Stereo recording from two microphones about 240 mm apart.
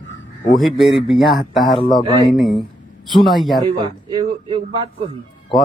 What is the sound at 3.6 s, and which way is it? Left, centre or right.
Speech, centre.